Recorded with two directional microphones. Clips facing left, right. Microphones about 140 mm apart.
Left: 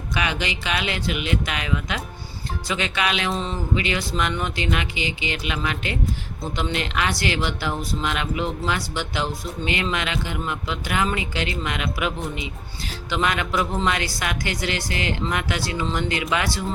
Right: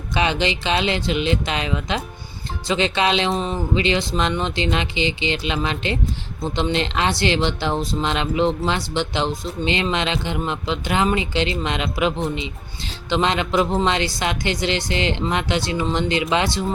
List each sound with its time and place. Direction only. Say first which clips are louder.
0.1 s speech: right 5 dB; 25° right (ahead or behind)